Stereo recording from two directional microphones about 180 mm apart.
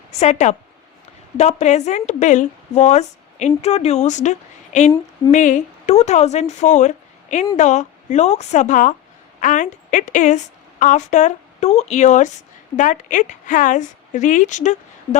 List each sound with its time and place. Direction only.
0.1 s a woman's voice: 40° left (ahead or behind)